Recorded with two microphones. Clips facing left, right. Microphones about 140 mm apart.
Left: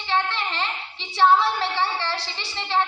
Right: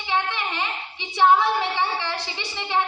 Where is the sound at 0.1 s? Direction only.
15° right (ahead or behind).